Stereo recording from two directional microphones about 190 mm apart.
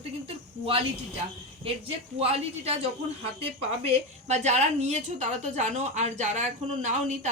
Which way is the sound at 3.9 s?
35° right (ahead or behind).